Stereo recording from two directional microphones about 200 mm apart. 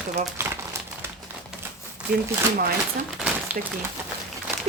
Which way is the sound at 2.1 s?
45° right (ahead or behind).